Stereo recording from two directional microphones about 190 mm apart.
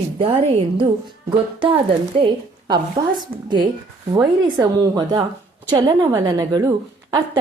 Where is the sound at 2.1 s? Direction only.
25° right (ahead or behind).